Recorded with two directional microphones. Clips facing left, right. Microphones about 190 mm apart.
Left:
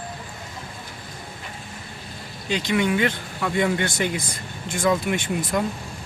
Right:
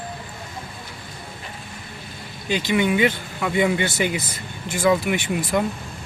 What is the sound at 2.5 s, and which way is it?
Speech, 5° right (ahead or behind).